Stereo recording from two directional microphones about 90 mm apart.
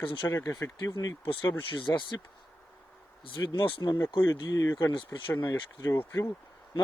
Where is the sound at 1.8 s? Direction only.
60° left (ahead or behind).